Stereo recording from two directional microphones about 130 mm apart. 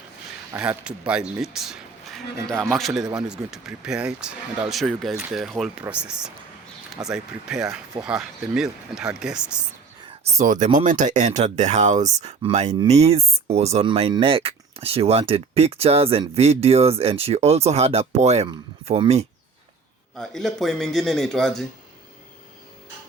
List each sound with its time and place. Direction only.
0.6 s speech: 10° right (ahead or behind)
10.3 s speech: 70° right (ahead or behind)
20.1 s speech: centre (ahead or behind)